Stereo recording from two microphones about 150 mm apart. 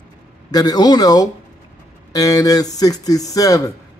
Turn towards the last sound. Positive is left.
turn(degrees=25)  # may be behind; listen again after turning